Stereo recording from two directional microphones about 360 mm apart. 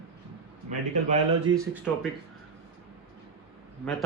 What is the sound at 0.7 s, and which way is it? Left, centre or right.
Speech, centre.